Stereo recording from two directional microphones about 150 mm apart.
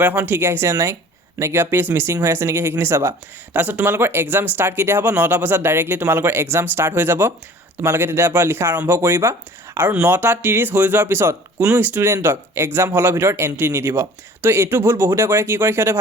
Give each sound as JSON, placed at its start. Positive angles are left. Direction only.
{"t": 0.0, "sound": "speech", "side_deg": -10}